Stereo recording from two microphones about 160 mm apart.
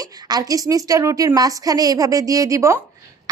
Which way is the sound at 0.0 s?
20° right (ahead or behind).